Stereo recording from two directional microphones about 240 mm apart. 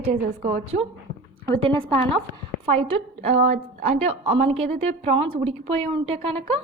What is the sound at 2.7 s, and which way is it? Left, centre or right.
A woman's voice, right.